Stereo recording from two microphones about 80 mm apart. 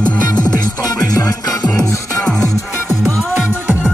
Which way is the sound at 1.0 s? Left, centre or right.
Left.